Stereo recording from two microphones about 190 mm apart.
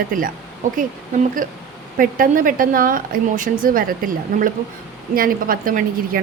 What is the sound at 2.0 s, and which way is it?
A woman's voice, 45° right (ahead or behind).